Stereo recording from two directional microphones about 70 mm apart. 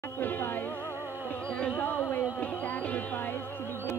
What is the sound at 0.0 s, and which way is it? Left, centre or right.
Music, left.